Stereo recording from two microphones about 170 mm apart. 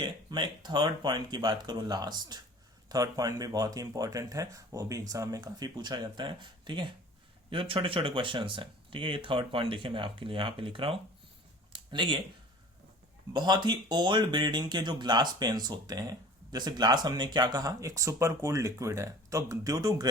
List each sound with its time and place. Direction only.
0.0 s speech: 25° right (ahead or behind)
11.7 s a sound: 30° right (ahead or behind)
13.3 s speech: 25° right (ahead or behind)